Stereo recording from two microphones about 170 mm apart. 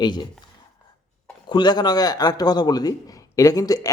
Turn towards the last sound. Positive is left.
turn(degrees=20)  # may be behind; listen again after turning